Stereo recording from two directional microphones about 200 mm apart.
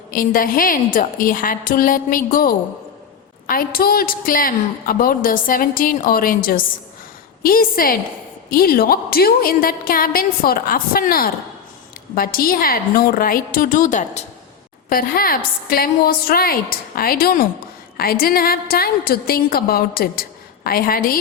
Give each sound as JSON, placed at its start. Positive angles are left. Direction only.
{"t": 0.1, "sound": "a woman's voice", "side_deg": 45}
{"t": 14.8, "sound": "a woman's voice", "side_deg": 45}